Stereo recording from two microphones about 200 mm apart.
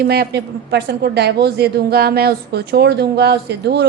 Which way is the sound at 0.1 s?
55° right (ahead or behind).